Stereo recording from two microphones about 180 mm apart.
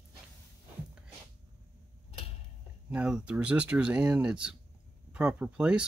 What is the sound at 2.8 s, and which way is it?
Speech, 5° right (ahead or behind).